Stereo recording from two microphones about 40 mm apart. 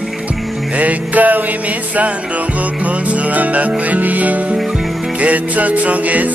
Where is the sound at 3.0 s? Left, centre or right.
Right.